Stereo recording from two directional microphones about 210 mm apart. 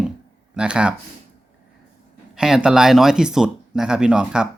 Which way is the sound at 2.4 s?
5° right (ahead or behind).